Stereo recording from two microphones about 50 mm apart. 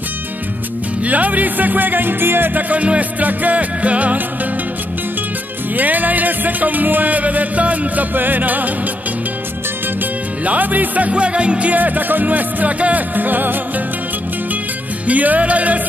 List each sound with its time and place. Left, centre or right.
1.0 s music: right
2.7 s music: right
5.8 s music: right
10.4 s music: right
11.7 s music: right
15.0 s music: right